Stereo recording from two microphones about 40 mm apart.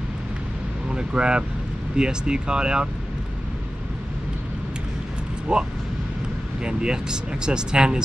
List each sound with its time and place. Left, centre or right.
0.9 s speech: right
5.5 s speech: centre